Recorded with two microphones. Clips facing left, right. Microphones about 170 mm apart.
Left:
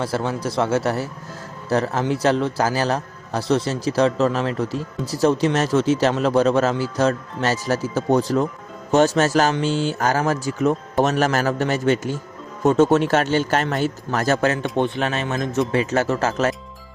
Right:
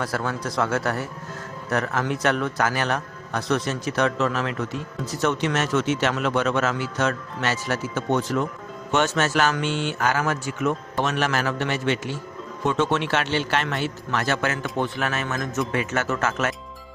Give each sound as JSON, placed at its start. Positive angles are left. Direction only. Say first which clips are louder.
{"t": 0.0, "sound": "a man's voice", "louder": "left 4 dB", "side_deg": 25}